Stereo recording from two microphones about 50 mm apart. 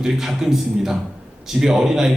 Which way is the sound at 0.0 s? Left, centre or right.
Centre.